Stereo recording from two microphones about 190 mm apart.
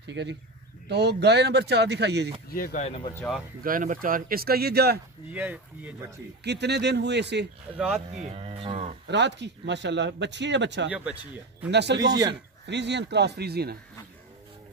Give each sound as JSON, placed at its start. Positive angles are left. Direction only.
{"t": 0.0, "sound": "speech", "side_deg": -65}
{"t": 2.5, "sound": "speech", "side_deg": 45}
{"t": 3.2, "sound": "speech", "side_deg": 0}
{"t": 3.6, "sound": "speech", "side_deg": -45}
{"t": 5.3, "sound": "speech", "side_deg": -10}
{"t": 6.4, "sound": "speech", "side_deg": -60}
{"t": 7.7, "sound": "speech", "side_deg": -5}
{"t": 8.2, "sound": "speech", "side_deg": -35}
{"t": 9.0, "sound": "speech", "side_deg": -65}
{"t": 12.0, "sound": "speech", "side_deg": -20}
{"t": 12.6, "sound": "speech", "side_deg": -65}